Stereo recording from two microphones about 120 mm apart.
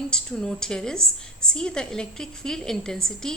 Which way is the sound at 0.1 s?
5° left (ahead or behind).